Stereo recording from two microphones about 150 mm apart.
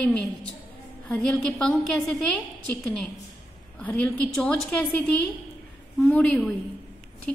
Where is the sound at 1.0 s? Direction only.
10° left (ahead or behind).